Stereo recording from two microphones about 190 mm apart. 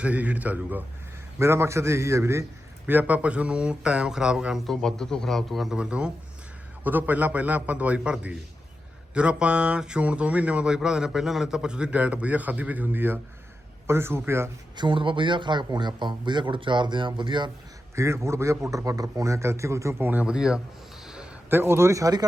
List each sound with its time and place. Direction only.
0.0 s a man's voice: 5° right (ahead or behind)
14.8 s a man's voice: 25° right (ahead or behind); by 20.6 s 5° right (ahead or behind)
21.0 s a sound: 5° right (ahead or behind); by 22.3 s 20° right (ahead or behind)